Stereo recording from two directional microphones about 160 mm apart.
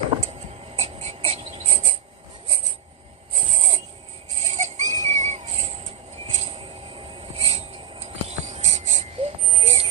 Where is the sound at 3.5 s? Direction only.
50° right (ahead or behind).